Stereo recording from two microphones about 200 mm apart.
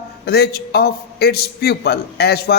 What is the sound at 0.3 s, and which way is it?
A man's voice, 50° left (ahead or behind).